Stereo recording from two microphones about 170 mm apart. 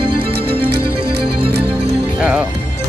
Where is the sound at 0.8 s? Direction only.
70° right (ahead or behind).